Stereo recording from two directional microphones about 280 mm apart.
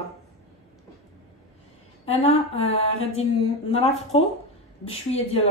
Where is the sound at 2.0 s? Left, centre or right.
Left.